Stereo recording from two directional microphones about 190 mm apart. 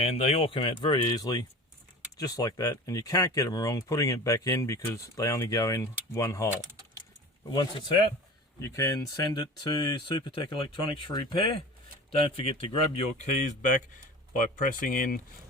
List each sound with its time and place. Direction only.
0.0 s speech: 30° left (ahead or behind); by 6.5 s 15° left (ahead or behind)
7.5 s speech: 20° left (ahead or behind); by 15.2 s 45° left (ahead or behind)